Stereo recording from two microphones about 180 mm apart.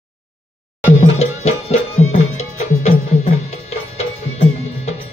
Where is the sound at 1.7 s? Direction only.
40° left (ahead or behind).